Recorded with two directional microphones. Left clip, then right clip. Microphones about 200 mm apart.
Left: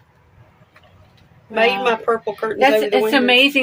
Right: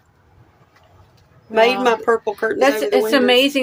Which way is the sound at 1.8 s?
60° right (ahead or behind).